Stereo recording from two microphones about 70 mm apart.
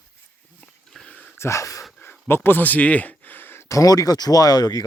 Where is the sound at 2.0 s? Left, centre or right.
Left.